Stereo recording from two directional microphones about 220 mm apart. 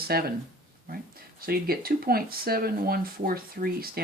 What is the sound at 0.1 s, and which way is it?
Speech, 45° right (ahead or behind).